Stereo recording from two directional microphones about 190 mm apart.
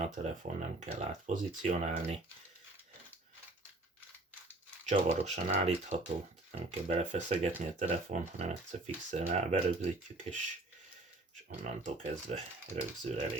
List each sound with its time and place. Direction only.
0.0 s speech: 35° right (ahead or behind)
4.9 s speech: 35° right (ahead or behind)
11.6 s speech: 40° right (ahead or behind)